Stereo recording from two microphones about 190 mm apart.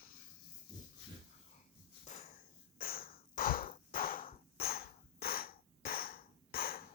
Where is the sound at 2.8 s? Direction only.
50° left (ahead or behind).